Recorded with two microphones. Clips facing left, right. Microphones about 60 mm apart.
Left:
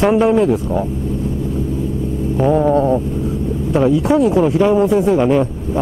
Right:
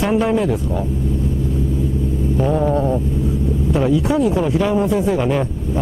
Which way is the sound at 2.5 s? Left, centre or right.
Centre.